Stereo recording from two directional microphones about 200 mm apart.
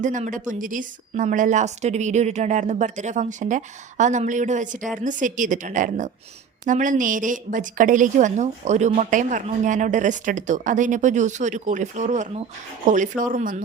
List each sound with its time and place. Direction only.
0.0 s speech: 40° right (ahead or behind)